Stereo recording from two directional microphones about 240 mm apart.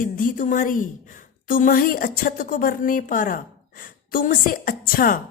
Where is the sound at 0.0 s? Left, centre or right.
Left.